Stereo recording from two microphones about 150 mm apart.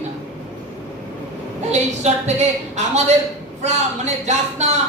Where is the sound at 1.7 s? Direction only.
50° right (ahead or behind).